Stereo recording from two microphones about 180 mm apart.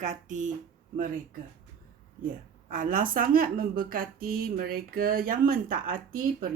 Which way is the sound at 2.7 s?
50° right (ahead or behind).